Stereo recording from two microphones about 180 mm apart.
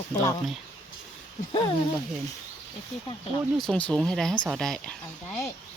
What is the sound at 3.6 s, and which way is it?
Speech, 5° left (ahead or behind).